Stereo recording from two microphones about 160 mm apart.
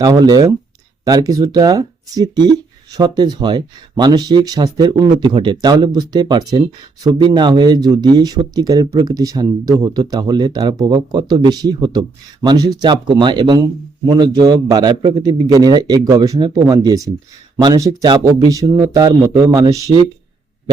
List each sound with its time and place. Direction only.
0.0 s speech: 25° right (ahead or behind)
19.9 s speech: 45° right (ahead or behind)